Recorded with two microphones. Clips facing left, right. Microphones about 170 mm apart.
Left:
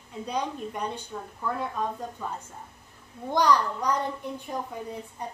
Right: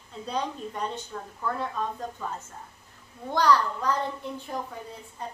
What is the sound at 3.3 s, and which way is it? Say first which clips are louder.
A woman's voice: even; 15° left (ahead or behind).